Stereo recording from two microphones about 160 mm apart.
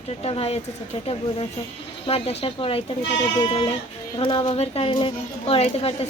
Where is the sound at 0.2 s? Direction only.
40° left (ahead or behind).